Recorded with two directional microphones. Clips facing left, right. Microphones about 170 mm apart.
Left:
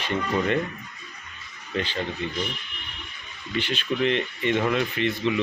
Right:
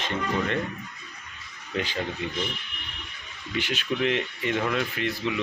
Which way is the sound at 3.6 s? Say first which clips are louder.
Left 2 dB; 10° right (ahead or behind).